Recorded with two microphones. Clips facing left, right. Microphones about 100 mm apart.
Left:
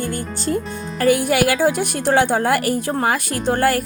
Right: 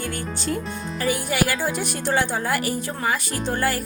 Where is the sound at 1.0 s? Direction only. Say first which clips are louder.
Left 7 dB; 60° left (ahead or behind).